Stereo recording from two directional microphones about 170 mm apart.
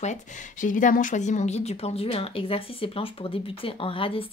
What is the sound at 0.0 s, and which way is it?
Speech, 45° left (ahead or behind).